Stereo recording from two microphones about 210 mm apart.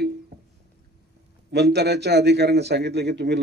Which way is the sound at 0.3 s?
50° right (ahead or behind).